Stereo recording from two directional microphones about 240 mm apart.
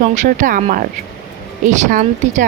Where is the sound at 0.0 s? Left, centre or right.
Right.